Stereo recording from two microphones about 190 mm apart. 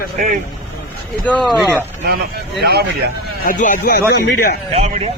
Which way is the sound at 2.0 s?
55° right (ahead or behind).